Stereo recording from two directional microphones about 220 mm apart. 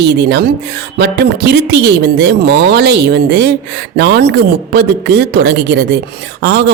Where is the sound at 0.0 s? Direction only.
50° right (ahead or behind).